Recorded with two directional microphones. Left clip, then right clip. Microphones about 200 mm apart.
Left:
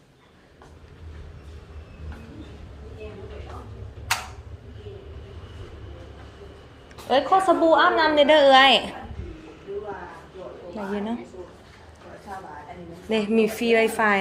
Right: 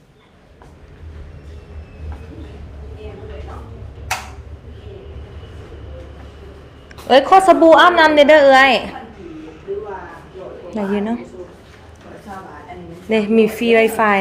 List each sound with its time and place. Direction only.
7.1 s a woman's voice: 20° right (ahead or behind)
8.2 s a woman's voice: 5° right (ahead or behind)
10.9 s a woman's voice: 5° right (ahead or behind)
13.1 s a woman's voice: centre (ahead or behind)